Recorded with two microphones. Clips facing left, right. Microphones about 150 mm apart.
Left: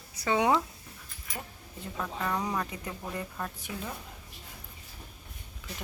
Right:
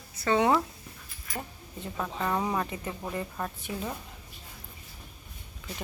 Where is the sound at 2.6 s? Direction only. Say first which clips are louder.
Right 3 dB; centre (ahead or behind).